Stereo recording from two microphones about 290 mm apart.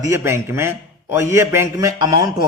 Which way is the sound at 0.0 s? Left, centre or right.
Centre.